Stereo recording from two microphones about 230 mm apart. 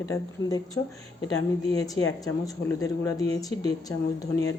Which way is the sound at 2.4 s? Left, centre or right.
Centre.